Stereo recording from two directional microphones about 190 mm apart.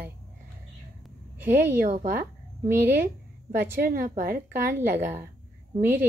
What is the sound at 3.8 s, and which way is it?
Speech, 45° right (ahead or behind).